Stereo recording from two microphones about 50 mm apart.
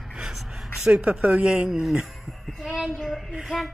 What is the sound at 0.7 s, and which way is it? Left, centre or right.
Speech, centre.